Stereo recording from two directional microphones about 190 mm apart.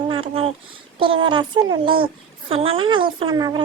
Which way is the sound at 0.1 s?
30° right (ahead or behind).